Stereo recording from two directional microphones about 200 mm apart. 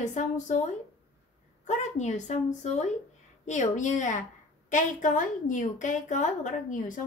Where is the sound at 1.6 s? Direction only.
35° left (ahead or behind).